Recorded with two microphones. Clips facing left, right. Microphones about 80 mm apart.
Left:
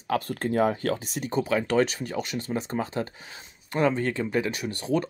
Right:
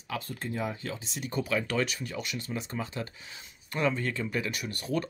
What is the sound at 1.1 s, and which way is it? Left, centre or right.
Speech, left.